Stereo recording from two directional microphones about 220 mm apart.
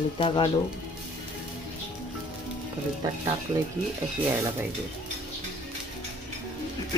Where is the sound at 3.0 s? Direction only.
15° right (ahead or behind).